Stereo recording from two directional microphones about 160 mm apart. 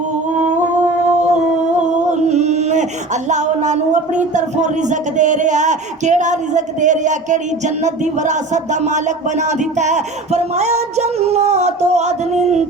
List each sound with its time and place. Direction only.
2.0 s a sound: 45° right (ahead or behind)
3.2 s speech: 50° right (ahead or behind)
9.7 s speech: 45° right (ahead or behind)